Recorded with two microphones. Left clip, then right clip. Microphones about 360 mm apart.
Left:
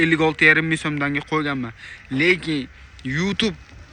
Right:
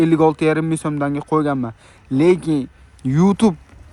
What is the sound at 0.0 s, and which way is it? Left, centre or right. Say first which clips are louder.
Speech: right 1 dB; centre.